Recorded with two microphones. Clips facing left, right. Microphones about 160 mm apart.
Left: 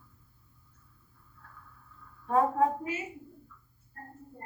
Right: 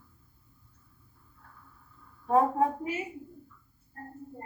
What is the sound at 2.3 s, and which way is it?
Speech, 25° right (ahead or behind).